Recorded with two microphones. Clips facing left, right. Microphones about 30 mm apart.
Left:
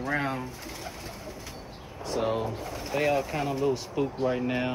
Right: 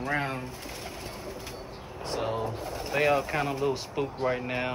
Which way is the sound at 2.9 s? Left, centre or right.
Right.